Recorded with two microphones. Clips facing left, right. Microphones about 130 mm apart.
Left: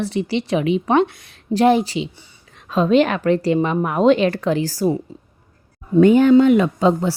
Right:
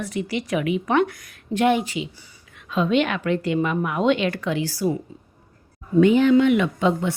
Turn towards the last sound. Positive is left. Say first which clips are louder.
# left 4 dB
turn(degrees=35)  # may be behind; listen again after turning